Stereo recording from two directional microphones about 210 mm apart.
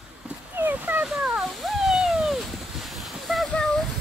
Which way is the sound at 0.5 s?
10° right (ahead or behind).